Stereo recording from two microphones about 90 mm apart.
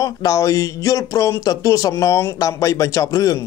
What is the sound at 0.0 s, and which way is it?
Speech, 40° left (ahead or behind).